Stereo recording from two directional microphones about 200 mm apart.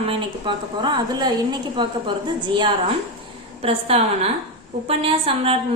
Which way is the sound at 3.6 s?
30° right (ahead or behind).